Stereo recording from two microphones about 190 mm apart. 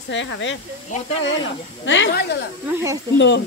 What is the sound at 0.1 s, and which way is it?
Speech, 75° left (ahead or behind).